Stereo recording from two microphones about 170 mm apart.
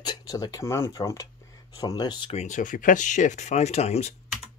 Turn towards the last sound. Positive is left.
turn(degrees=40)  # may be behind; listen again after turning